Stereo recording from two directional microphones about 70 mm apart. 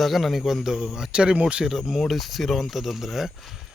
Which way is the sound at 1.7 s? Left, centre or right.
Centre.